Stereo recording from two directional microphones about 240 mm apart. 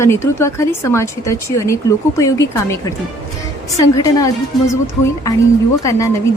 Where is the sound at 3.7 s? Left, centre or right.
Centre.